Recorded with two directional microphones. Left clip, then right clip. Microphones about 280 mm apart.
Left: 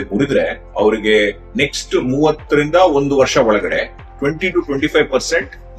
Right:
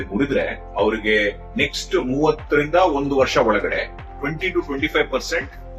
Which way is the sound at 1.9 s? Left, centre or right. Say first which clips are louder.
Left 4 dB; left.